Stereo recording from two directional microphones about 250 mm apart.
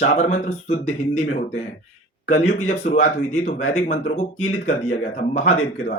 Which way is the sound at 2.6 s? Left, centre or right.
Left.